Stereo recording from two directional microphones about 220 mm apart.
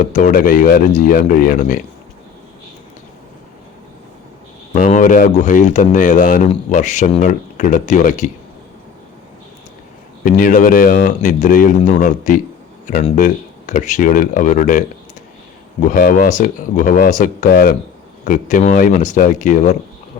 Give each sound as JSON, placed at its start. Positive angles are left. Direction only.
{"t": 0.0, "sound": "speech", "side_deg": 35}
{"t": 4.7, "sound": "speech", "side_deg": 35}
{"t": 10.2, "sound": "speech", "side_deg": 40}
{"t": 15.9, "sound": "speech", "side_deg": 40}